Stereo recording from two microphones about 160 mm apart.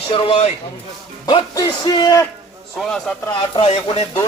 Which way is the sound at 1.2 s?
25° left (ahead or behind).